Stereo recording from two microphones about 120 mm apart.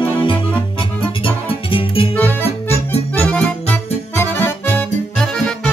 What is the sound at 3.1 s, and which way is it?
Accordion, 10° left (ahead or behind).